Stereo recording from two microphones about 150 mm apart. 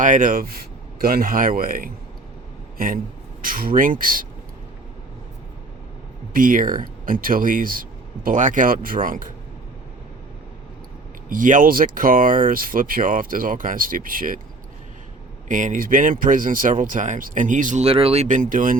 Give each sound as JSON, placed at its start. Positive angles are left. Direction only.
{"t": 0.0, "sound": "speech", "side_deg": -60}
{"t": 6.3, "sound": "speech", "side_deg": -65}
{"t": 11.3, "sound": "speech", "side_deg": -60}
{"t": 15.4, "sound": "speech", "side_deg": -60}
{"t": 17.8, "sound": "speech", "side_deg": -40}